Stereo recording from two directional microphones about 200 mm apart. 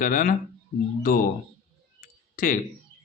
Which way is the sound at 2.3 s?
45° left (ahead or behind).